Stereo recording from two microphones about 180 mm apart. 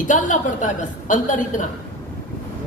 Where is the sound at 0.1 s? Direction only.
45° left (ahead or behind).